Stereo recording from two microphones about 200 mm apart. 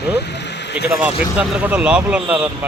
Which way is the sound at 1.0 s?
5° right (ahead or behind).